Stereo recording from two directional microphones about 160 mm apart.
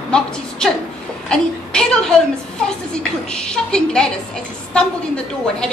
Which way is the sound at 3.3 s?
5° left (ahead or behind).